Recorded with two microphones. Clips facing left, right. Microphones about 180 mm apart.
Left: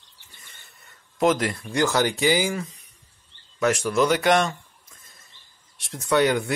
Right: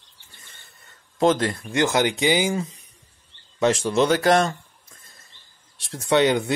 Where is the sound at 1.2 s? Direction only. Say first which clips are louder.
Right 2 dB; 30° right (ahead or behind).